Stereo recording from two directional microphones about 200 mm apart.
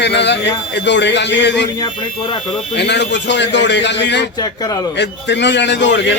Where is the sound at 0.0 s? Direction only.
60° left (ahead or behind).